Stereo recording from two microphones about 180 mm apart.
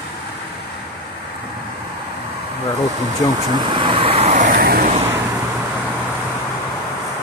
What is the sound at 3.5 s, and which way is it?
Vehicle, 25° right (ahead or behind).